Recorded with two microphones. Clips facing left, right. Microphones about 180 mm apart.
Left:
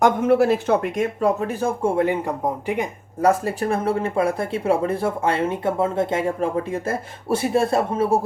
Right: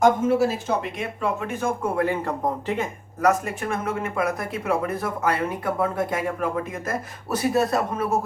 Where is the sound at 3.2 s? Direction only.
30° left (ahead or behind).